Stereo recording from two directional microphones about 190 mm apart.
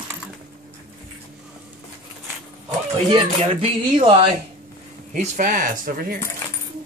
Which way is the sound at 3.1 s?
30° right (ahead or behind).